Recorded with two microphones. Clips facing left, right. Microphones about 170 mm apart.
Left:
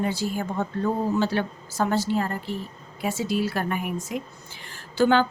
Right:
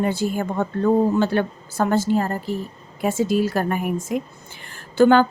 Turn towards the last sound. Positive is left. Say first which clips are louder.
# right 6 dB
turn(degrees=-50)  # may be behind; listen again after turning